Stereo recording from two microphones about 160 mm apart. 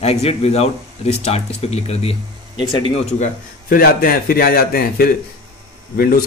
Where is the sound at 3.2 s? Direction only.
60° left (ahead or behind).